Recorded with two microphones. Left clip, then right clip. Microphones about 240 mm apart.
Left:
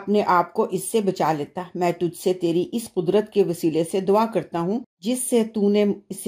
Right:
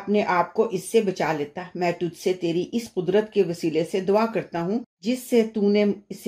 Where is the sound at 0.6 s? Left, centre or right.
Left.